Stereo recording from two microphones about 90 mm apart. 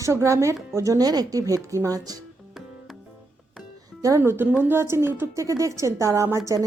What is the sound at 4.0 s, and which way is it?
A woman's voice, 35° right (ahead or behind).